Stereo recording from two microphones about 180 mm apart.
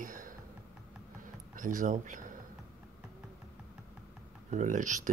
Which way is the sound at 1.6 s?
45° right (ahead or behind).